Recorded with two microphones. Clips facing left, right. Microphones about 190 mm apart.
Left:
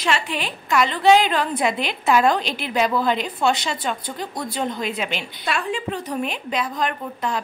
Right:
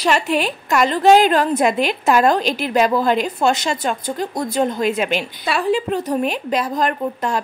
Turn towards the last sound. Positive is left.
turn(degrees=-45)  # may be behind; listen again after turning